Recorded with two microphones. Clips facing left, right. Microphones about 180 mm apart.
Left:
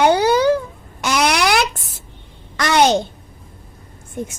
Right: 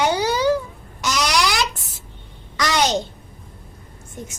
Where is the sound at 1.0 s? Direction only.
55° left (ahead or behind).